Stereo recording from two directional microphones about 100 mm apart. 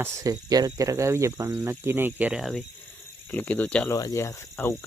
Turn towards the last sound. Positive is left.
turn(degrees=25)  # may be behind; listen again after turning